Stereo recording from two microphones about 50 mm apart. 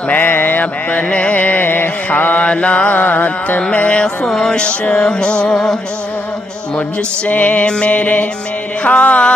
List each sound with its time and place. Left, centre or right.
0.1 s mantra: left
2.4 s mantra: left
4.3 s music: centre
7.2 s mantra: left